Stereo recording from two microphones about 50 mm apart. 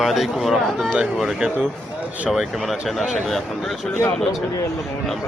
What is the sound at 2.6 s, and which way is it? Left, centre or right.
Speech, centre.